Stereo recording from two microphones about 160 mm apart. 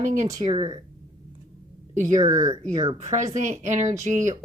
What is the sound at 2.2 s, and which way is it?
Speech, 20° right (ahead or behind).